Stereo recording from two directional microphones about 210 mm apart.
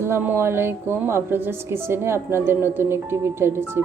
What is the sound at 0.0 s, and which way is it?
A woman's voice, 10° right (ahead or behind).